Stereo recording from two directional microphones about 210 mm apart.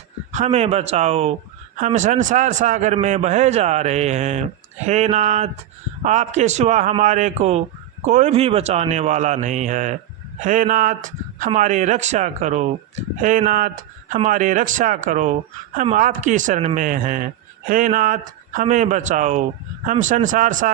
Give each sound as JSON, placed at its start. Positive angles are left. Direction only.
{"t": 0.3, "sound": "speech", "side_deg": -35}